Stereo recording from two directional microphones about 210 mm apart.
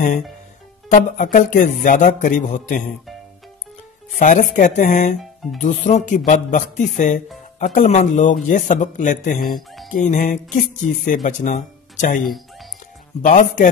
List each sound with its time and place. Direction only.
0.8 s a man's voice: 35° left (ahead or behind)
4.2 s a man's voice: 35° left (ahead or behind)
9.6 s music: centre (ahead or behind)
9.8 s a man's voice: 40° left (ahead or behind)
13.2 s a man's voice: 35° left (ahead or behind)